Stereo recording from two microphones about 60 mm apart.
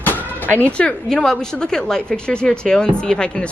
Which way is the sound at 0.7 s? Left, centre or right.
Centre.